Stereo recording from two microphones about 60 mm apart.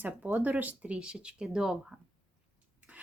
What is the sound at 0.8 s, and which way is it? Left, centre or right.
Speech, centre.